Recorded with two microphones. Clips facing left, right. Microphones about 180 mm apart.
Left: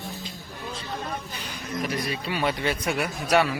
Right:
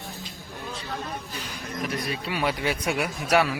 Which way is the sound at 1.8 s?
Centre (ahead or behind).